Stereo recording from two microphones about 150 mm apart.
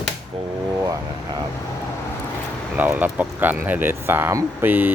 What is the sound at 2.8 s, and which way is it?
Speech, 10° right (ahead or behind).